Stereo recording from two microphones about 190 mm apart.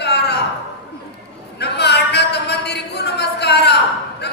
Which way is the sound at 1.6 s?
60° left (ahead or behind).